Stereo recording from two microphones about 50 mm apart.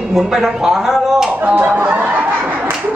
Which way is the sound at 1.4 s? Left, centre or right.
Right.